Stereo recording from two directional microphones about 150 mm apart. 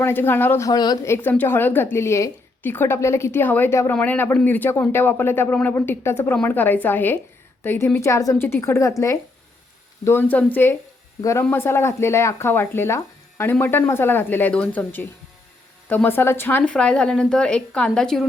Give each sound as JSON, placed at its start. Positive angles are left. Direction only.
{"t": 0.0, "sound": "speech", "side_deg": 15}
{"t": 0.7, "sound": "a woman's voice", "side_deg": 25}
{"t": 1.1, "sound": "a woman's voice", "side_deg": 15}